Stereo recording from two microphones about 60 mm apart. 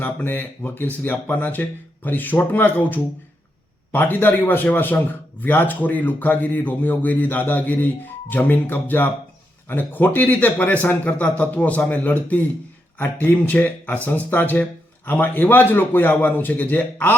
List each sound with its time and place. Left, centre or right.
0.0 s a man's voice: left